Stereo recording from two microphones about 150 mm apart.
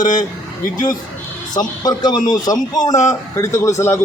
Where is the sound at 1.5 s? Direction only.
25° left (ahead or behind).